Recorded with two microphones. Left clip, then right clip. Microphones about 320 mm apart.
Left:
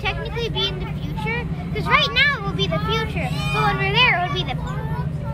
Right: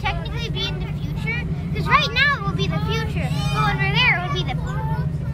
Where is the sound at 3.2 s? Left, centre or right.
Centre.